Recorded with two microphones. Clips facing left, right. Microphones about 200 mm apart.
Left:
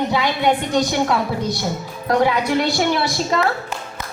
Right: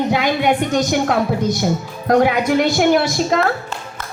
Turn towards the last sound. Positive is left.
turn(degrees=-50)  # may be behind; listen again after turning